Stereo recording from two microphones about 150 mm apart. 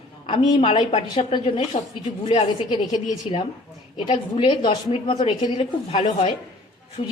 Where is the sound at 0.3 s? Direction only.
35° left (ahead or behind).